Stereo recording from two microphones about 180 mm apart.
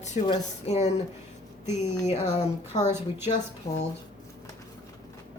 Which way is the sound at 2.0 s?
40° left (ahead or behind).